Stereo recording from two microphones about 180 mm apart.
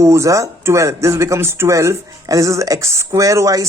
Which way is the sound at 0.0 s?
15° right (ahead or behind).